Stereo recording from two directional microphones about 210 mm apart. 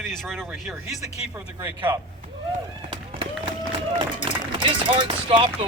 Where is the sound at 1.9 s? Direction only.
15° right (ahead or behind).